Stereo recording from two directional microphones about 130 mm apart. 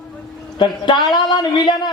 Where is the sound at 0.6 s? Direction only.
35° left (ahead or behind).